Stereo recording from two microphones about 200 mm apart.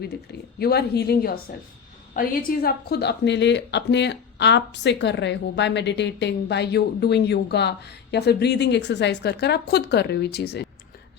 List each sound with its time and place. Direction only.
0.6 s a woman's voice: 55° left (ahead or behind)